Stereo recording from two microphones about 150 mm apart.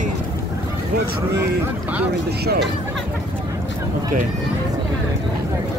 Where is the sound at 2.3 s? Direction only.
90° right.